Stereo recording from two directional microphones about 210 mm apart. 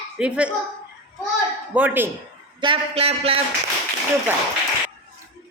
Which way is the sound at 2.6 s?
25° right (ahead or behind).